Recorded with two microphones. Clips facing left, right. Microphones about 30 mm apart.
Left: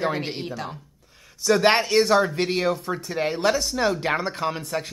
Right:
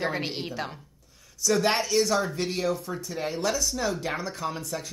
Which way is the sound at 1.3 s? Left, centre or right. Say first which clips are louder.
Left 5 dB; left.